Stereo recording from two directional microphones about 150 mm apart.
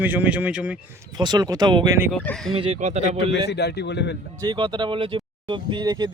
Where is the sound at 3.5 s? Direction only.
90° left.